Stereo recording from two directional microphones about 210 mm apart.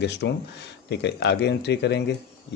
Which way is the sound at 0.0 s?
55° left (ahead or behind).